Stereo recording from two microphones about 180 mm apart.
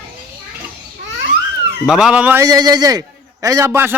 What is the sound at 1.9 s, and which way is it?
A man's voice, 5° right (ahead or behind).